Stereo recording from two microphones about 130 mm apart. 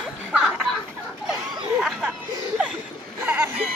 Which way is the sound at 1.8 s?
5° right (ahead or behind).